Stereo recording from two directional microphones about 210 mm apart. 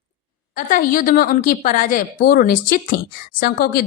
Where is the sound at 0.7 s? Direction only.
40° left (ahead or behind).